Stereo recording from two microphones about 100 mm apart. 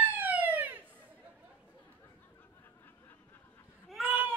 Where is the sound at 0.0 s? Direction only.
15° right (ahead or behind).